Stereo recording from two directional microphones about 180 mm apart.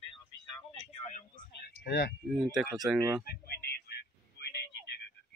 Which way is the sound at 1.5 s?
65° left (ahead or behind).